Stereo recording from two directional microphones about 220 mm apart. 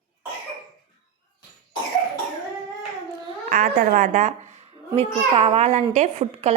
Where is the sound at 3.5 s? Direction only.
40° right (ahead or behind).